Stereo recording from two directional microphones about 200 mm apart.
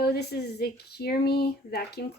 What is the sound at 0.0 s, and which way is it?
Speech, 55° left (ahead or behind).